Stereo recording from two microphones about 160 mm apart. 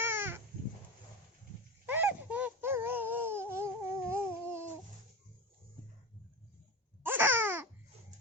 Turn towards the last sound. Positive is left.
turn(degrees=-15)  # may be behind; listen again after turning